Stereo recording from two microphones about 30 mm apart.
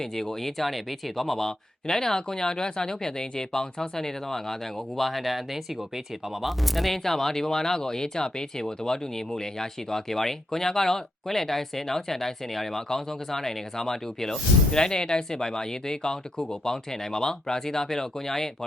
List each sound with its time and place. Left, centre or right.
0.0 s speech: centre
4.9 s speech: centre
6.4 s speech: centre
14.7 s speech: left